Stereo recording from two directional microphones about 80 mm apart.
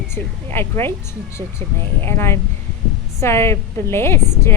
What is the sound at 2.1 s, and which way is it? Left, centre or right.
A woman's voice, left.